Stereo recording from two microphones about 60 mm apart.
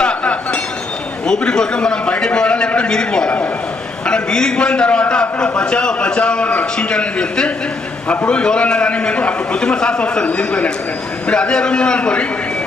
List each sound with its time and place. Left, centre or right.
0.0 s chink: centre
1.3 s a man's voice: centre